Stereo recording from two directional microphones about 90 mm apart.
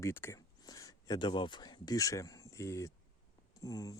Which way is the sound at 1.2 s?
65° left (ahead or behind).